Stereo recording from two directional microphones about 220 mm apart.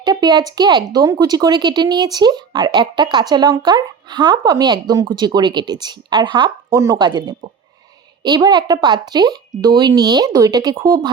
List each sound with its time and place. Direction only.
0.0 s speech: 20° right (ahead or behind)